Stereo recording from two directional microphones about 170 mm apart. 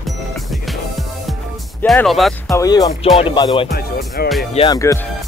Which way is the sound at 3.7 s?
60° left (ahead or behind).